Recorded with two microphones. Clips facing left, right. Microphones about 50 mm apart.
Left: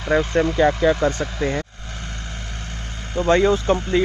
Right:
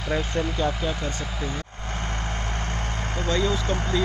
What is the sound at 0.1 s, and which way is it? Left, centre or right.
Speech, centre.